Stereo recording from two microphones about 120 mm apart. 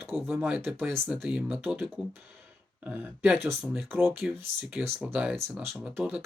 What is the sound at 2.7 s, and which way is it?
Speech, 15° right (ahead or behind).